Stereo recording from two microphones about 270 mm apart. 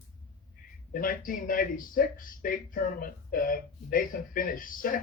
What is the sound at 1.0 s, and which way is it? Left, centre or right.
Speech, left.